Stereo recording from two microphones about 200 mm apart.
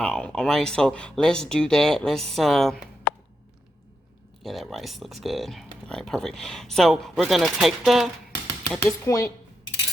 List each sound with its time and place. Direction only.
0.0 s speech: 5° left (ahead or behind)
4.4 s speech: centre (ahead or behind)
8.7 s speech: 15° left (ahead or behind)